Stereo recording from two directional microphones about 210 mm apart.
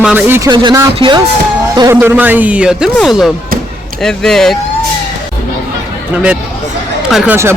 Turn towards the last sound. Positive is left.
turn(degrees=0)  # may be behind; listen again after turning